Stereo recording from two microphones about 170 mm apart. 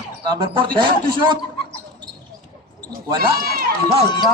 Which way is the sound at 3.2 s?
65° right (ahead or behind).